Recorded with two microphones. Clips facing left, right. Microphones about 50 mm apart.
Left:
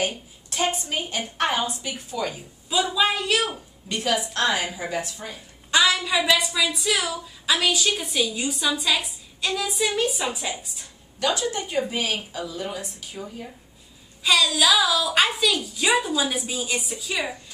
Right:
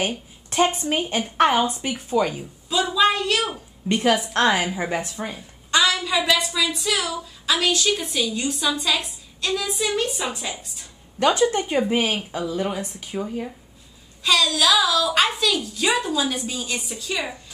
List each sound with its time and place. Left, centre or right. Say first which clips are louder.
0.0 s a woman's voice: right 1 dB; right
2.7 s speech: right 3 dB; centre
3.9 s speech: right 5 dB; right
5.7 s speech: even; centre
11.1 s speech: right 6 dB; right
14.2 s speech: right 1 dB; centre